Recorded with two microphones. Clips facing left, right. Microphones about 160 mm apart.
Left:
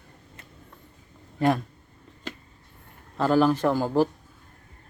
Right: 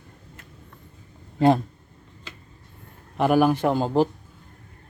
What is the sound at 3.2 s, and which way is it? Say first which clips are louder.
Speech: right 2 dB; 15° right (ahead or behind).